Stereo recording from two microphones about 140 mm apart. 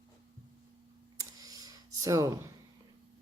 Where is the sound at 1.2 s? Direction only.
25° right (ahead or behind).